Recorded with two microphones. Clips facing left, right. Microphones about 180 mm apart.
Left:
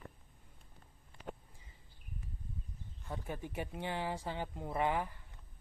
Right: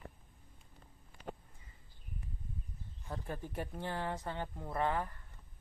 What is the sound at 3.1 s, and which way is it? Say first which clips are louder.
Speech: even; 5° left (ahead or behind).